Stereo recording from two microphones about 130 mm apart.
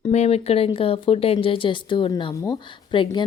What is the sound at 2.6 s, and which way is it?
Speech, 40° left (ahead or behind).